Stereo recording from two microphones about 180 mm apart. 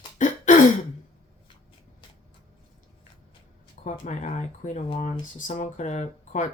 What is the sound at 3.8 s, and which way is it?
Speech, 45° left (ahead or behind).